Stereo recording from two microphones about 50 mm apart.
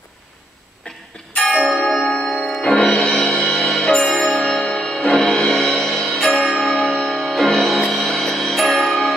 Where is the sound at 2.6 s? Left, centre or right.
Left; by 7.8 s centre.